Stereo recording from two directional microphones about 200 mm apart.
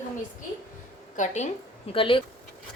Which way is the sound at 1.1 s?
35° left (ahead or behind).